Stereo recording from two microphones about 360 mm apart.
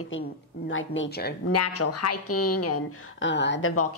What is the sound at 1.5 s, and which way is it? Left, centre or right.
A woman's voice, left.